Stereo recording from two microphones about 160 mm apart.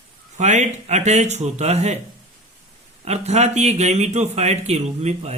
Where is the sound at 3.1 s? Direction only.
45° right (ahead or behind).